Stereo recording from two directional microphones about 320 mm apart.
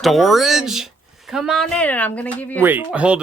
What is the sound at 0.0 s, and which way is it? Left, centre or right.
Speech, centre.